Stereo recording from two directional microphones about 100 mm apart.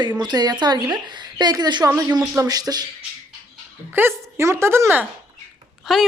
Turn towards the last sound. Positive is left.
turn(degrees=-5)  # may be behind; listen again after turning